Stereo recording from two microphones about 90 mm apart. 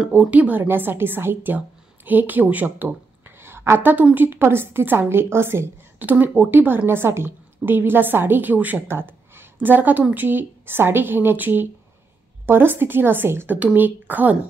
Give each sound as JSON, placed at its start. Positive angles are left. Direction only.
{"t": 0.2, "sound": "speech", "side_deg": -15}